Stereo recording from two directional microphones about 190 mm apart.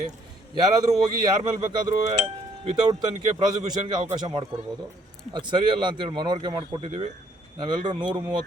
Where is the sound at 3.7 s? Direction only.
20° right (ahead or behind).